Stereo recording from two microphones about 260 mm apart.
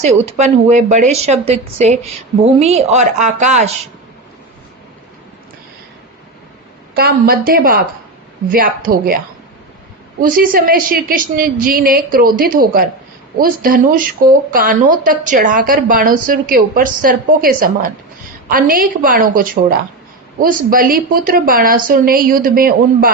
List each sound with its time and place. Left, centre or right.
0.3 s a woman's voice: right
6.9 s speech: right